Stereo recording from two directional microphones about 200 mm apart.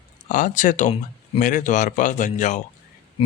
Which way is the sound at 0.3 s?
40° left (ahead or behind).